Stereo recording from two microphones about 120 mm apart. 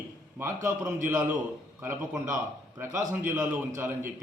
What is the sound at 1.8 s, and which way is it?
Speech, 20° right (ahead or behind).